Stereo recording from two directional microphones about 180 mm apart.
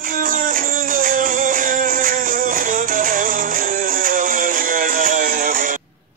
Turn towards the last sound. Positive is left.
turn(degrees=-50)  # may be behind; listen again after turning